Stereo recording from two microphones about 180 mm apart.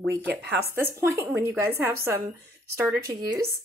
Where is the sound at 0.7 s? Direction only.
10° right (ahead or behind).